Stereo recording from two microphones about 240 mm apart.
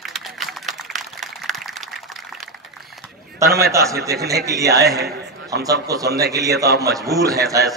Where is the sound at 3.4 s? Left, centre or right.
Centre.